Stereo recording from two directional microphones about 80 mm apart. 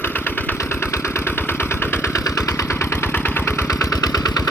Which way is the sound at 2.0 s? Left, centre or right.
Left.